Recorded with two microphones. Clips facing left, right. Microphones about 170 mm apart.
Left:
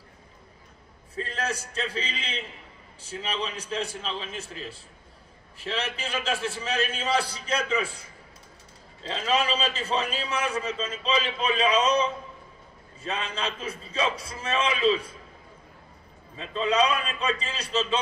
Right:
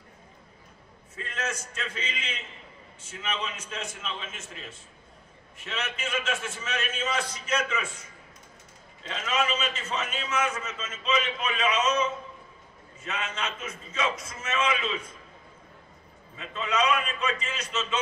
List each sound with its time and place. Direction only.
1.1 s a man's voice: 35° left (ahead or behind)
16.3 s a man's voice: 30° left (ahead or behind)